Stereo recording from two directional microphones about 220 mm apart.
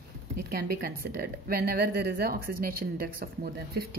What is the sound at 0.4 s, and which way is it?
A woman's voice, 45° right (ahead or behind).